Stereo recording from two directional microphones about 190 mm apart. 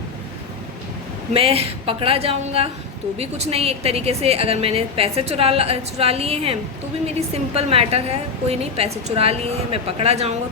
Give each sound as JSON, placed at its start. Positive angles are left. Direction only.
{"t": 1.3, "sound": "a woman's voice", "side_deg": -30}